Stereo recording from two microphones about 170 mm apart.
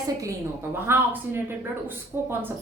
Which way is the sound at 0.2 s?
15° right (ahead or behind).